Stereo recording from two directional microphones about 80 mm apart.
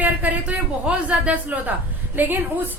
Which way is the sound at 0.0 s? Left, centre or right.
Centre.